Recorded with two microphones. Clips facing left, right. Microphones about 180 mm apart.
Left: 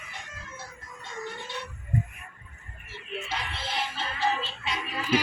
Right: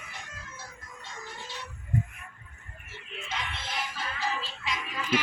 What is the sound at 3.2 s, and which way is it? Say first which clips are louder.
Music: right 2 dB; 35° left (ahead or behind).